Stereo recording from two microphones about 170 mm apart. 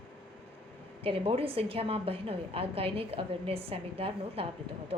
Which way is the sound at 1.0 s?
35° right (ahead or behind).